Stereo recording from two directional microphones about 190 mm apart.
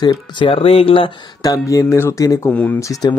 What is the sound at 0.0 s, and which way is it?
Speech, 25° left (ahead or behind).